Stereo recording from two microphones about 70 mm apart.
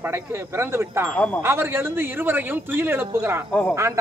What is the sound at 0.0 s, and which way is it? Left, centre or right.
Speech, right.